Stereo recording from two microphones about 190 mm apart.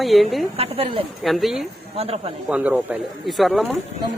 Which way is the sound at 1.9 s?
30° right (ahead or behind).